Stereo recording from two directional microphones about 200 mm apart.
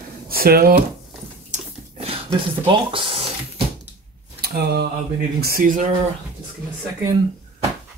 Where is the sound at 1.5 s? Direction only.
30° right (ahead or behind).